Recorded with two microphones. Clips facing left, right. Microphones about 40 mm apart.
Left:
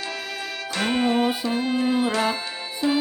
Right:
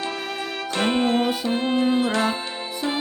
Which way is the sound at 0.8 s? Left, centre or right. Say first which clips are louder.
Right 1 dB; right.